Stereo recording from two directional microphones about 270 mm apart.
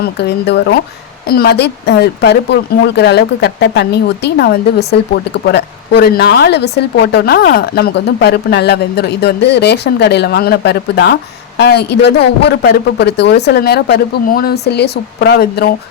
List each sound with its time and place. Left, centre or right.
0.0 s speech: left